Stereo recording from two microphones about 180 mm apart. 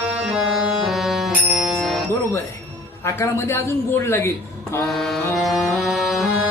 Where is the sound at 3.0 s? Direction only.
15° left (ahead or behind).